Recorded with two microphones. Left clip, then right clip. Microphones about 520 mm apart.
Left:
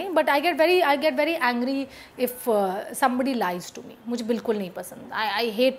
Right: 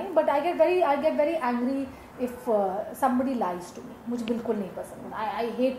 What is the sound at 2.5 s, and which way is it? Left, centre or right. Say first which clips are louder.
A woman's voice: even; left.